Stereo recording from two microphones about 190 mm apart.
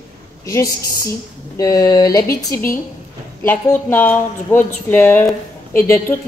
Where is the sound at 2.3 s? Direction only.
50° left (ahead or behind).